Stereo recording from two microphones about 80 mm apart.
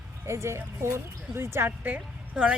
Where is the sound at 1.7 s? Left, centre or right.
Centre.